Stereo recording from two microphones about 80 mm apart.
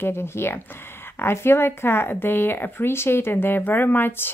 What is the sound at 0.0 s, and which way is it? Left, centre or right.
Speech, left.